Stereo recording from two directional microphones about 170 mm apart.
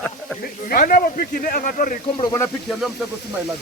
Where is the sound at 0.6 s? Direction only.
55° left (ahead or behind).